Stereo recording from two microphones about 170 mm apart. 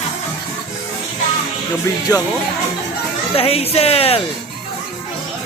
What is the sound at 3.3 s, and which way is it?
Speech, 35° left (ahead or behind).